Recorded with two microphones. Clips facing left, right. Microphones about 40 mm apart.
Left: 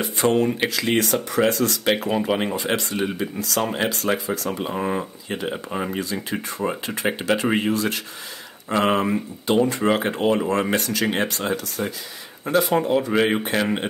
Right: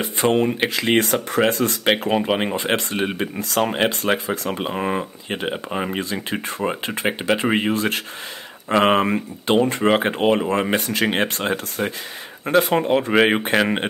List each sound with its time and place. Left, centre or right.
0.0 s speech: right
4.6 s speech: right